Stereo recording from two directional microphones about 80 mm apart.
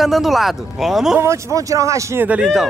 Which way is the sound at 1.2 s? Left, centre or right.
Right.